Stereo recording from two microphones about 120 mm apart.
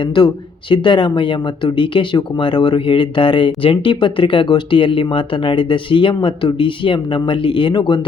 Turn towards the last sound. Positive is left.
turn(degrees=40)  # may be behind; listen again after turning